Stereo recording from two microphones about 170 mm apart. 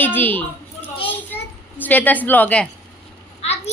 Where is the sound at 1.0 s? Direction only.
10° left (ahead or behind).